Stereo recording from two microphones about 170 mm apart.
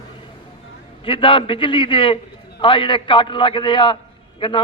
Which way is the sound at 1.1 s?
30° left (ahead or behind).